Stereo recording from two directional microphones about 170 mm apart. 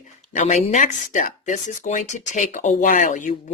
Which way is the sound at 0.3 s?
40° left (ahead or behind).